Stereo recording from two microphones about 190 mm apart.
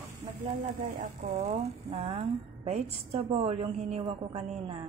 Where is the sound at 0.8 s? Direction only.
45° right (ahead or behind).